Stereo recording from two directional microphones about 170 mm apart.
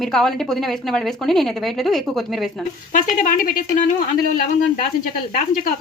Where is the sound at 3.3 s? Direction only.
55° left (ahead or behind).